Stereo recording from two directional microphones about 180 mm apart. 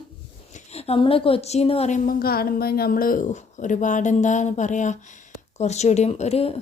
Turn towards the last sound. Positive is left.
turn(degrees=35)  # may be behind; listen again after turning